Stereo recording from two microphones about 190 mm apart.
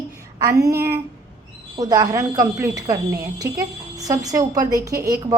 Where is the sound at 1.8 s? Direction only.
20° right (ahead or behind).